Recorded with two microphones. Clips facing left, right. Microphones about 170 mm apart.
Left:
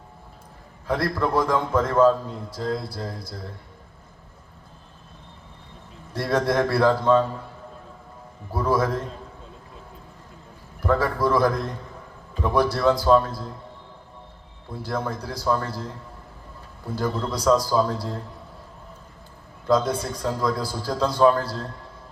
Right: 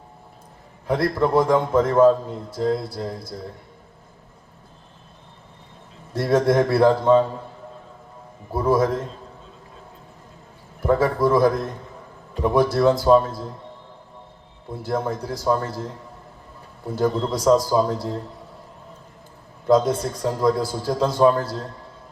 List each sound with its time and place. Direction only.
0.9 s a man's voice: 25° right (ahead or behind)
6.1 s a man's voice: 25° right (ahead or behind)
8.5 s a man's voice: 20° right (ahead or behind)
10.8 s a man's voice: 25° right (ahead or behind)
14.8 s a man's voice: 25° right (ahead or behind)
17.0 s a man's voice: 25° right (ahead or behind)
19.6 s a man's voice: 25° right (ahead or behind)